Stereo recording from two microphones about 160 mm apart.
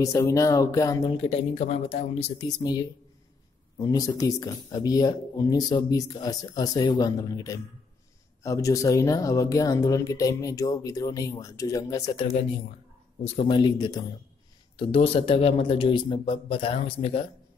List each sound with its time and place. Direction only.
0.0 s speech: 20° left (ahead or behind)
1.0 s a man's voice: 40° left (ahead or behind); by 12.3 s 20° left (ahead or behind)
13.2 s a man's voice: 40° left (ahead or behind)